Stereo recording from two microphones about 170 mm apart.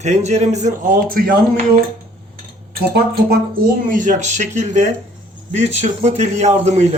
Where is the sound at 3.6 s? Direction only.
55° right (ahead or behind).